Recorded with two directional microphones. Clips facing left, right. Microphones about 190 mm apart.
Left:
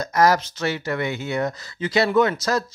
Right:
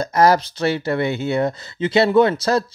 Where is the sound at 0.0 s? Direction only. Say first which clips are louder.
Right 3 dB; 30° right (ahead or behind).